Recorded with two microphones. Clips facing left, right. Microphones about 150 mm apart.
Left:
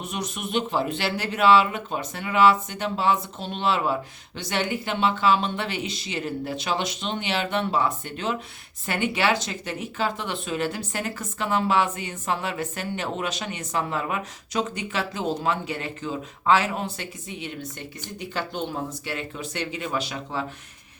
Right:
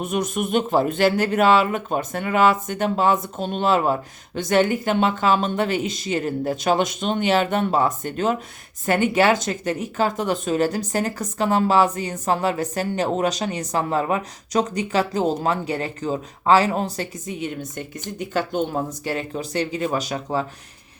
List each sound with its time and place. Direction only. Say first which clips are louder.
0.0 s speech: right 8 dB; 50° right (ahead or behind)